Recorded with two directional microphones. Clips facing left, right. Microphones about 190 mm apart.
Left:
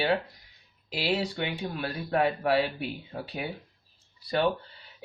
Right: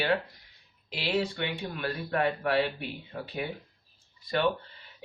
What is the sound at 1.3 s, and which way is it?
Speech, 35° left (ahead or behind).